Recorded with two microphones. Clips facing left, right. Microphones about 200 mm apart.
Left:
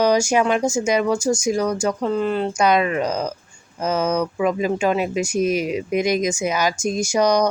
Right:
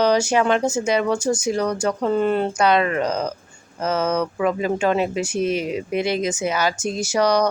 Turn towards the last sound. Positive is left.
turn(degrees=15)  # may be behind; listen again after turning